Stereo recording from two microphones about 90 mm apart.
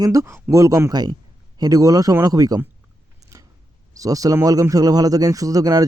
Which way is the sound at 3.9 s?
40° right (ahead or behind).